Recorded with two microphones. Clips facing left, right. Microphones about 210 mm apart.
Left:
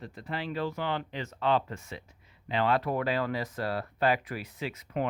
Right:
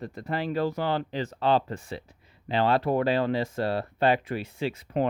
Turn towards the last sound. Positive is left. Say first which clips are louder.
# right 5 dB
turn(degrees=-30)  # may be behind; listen again after turning